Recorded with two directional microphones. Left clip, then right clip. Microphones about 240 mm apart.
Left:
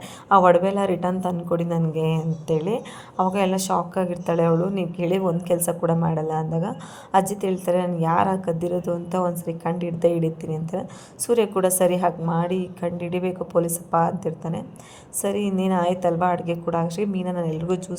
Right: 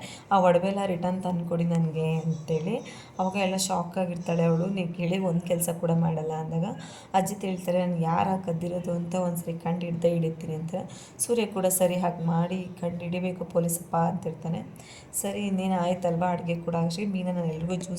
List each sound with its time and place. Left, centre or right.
0.3 s speech: left
10.1 s a woman's voice: left
10.5 s speech: left